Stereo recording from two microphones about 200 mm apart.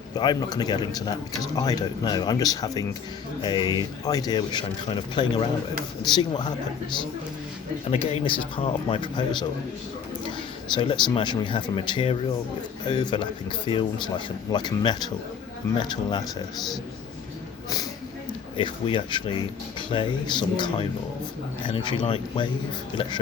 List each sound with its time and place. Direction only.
0.1 s speech: 20° left (ahead or behind)
7.9 s speech: 30° left (ahead or behind)
10.8 s speech: 25° left (ahead or behind)
18.5 s speech: 25° left (ahead or behind)